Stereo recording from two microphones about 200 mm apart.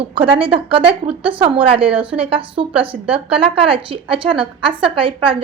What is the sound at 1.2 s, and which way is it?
A woman's voice, 25° right (ahead or behind).